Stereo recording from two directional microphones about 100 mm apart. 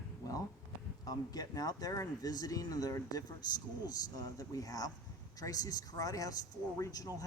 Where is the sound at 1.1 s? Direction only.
40° left (ahead or behind).